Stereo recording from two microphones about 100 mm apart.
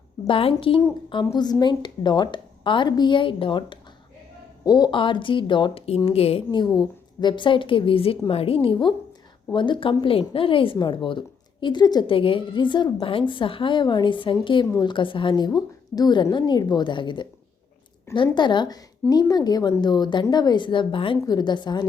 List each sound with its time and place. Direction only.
0.3 s a woman's voice: 65° left (ahead or behind)
1.2 s a woman's voice: 40° left (ahead or behind); by 3.8 s 60° left (ahead or behind)
4.6 s speech: 40° left (ahead or behind)
4.9 s a woman's voice: 55° left (ahead or behind)
6.1 s a woman's voice: 90° left
6.7 s a woman's voice: 50° left (ahead or behind)
10.0 s a woman's voice: 65° left (ahead or behind); by 12.0 s 45° left (ahead or behind)
12.0 s a woman's voice: 65° left (ahead or behind)
18.3 s a woman's voice: 50° left (ahead or behind)